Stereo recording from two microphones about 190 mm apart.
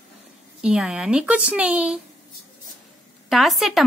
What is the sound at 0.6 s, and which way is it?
Speech, 5° right (ahead or behind).